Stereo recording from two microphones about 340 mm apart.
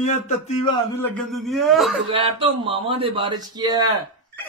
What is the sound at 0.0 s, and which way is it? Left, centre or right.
Speech, centre.